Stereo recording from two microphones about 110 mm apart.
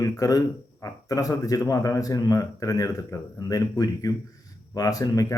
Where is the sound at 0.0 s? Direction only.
35° left (ahead or behind).